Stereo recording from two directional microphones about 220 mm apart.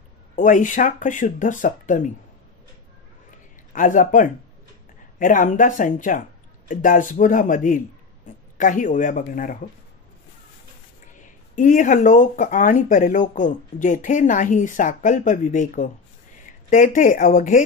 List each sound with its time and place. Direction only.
0.4 s speech: 35° left (ahead or behind)
3.7 s speech: 35° left (ahead or behind)
11.5 s speech: 35° left (ahead or behind)